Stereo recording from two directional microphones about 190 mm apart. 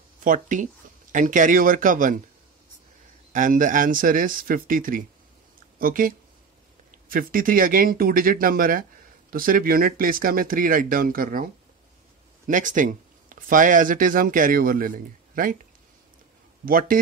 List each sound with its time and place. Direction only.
0.2 s speech: 45° right (ahead or behind)
3.3 s speech: 45° right (ahead or behind)
12.4 s speech: 45° right (ahead or behind)
16.6 s speech: 50° right (ahead or behind)